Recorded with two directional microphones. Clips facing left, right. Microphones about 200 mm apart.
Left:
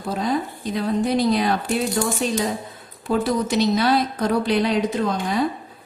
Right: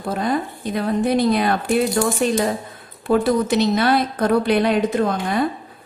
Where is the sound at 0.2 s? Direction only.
55° right (ahead or behind).